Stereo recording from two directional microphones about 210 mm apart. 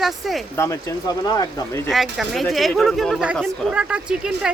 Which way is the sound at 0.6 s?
15° left (ahead or behind).